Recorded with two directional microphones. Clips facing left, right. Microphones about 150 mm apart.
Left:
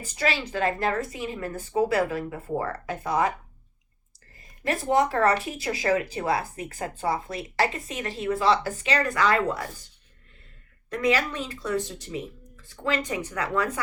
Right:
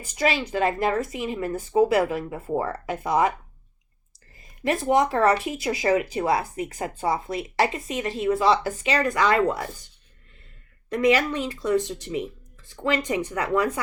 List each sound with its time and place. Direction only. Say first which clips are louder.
0.2 s speech: right 3 dB; 15° right (ahead or behind)
4.6 s speech: right 2 dB; 15° right (ahead or behind)
10.8 s speech: right 4 dB; 20° right (ahead or behind)
12.8 s speech: right 3 dB; 20° right (ahead or behind)